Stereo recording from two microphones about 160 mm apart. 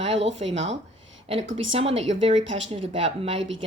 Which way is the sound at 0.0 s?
40° right (ahead or behind).